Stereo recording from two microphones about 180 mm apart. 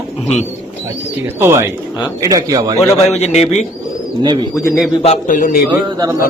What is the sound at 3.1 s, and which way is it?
Speech, 35° left (ahead or behind).